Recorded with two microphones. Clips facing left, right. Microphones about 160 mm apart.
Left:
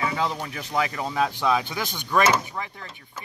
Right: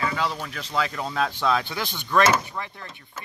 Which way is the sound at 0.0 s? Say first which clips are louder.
Left 1 dB; 15° left (ahead or behind).